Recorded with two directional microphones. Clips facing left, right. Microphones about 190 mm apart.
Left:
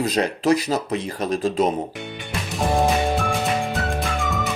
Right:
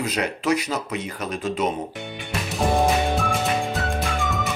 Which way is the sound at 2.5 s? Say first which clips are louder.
Even; centre (ahead or behind).